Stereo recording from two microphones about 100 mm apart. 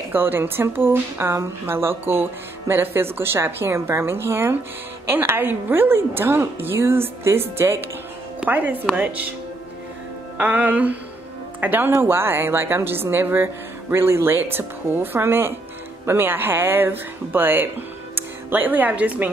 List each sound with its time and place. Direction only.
0.1 s a woman's voice: 20° right (ahead or behind)
8.9 s music: 15° right (ahead or behind)
10.4 s music: 15° right (ahead or behind)
11.6 s a woman's voice: 20° right (ahead or behind)